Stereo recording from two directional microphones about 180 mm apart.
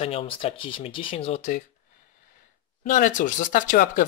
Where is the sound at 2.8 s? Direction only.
45° left (ahead or behind).